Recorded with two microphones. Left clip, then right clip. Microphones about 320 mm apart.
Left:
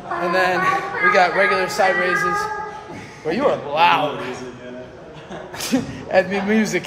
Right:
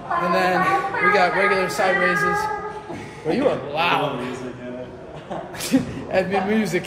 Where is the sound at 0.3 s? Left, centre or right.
Left.